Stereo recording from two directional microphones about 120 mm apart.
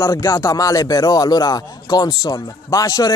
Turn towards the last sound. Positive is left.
turn(degrees=30)  # may be behind; listen again after turning